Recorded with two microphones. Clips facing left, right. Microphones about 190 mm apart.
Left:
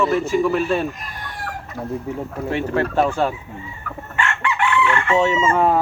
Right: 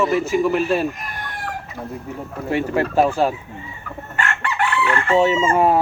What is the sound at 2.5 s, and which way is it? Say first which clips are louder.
Chicken: right 2 dB; 10° right (ahead or behind).